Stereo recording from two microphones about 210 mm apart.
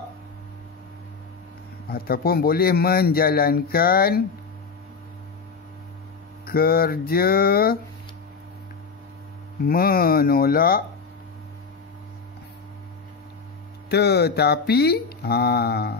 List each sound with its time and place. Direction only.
1.9 s a man's voice: 45° left (ahead or behind)
6.4 s a man's voice: 45° left (ahead or behind)
9.6 s a man's voice: 45° left (ahead or behind)
13.8 s a man's voice: 50° left (ahead or behind)